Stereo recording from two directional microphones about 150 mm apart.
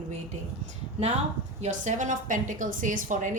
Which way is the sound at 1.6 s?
55° right (ahead or behind).